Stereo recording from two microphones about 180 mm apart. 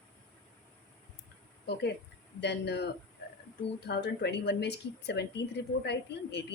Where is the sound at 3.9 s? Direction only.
65° left (ahead or behind).